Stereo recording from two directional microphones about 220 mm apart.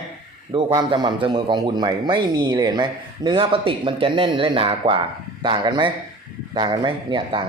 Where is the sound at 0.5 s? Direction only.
20° right (ahead or behind).